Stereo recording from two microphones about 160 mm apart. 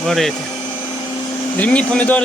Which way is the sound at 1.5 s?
10° left (ahead or behind).